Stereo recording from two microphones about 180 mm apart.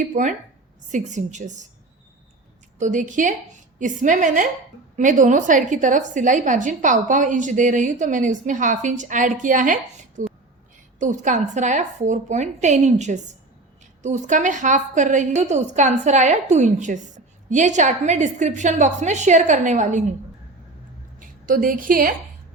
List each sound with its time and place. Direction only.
0.0 s a woman's voice: 45° right (ahead or behind)
2.7 s a woman's voice: 45° right (ahead or behind)
10.2 s a sound: 45° right (ahead or behind)
11.0 s a woman's voice: 45° right (ahead or behind)
21.2 s a woman's voice: 50° right (ahead or behind)